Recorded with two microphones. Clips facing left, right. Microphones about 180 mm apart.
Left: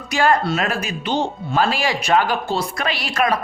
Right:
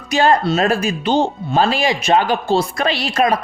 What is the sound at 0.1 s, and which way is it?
Speech, 25° right (ahead or behind).